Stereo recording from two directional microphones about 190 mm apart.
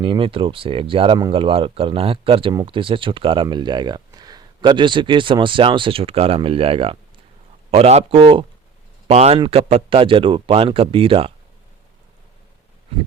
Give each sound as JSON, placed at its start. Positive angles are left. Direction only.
{"t": 0.0, "sound": "speech", "side_deg": -25}